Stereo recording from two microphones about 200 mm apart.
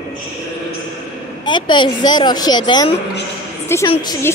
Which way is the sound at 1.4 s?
25° left (ahead or behind).